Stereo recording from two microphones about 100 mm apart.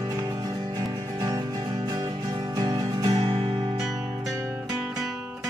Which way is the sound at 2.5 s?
40° right (ahead or behind).